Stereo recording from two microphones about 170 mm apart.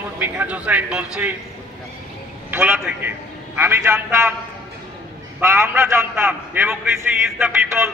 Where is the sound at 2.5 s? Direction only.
10° right (ahead or behind).